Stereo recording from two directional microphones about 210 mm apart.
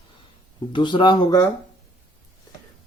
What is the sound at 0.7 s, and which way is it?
Speech, 20° left (ahead or behind).